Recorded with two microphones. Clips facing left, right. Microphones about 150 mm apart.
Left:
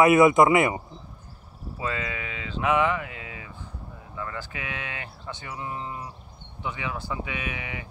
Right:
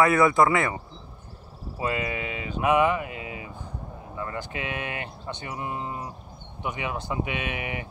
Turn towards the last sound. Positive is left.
turn(degrees=-20)  # may be behind; listen again after turning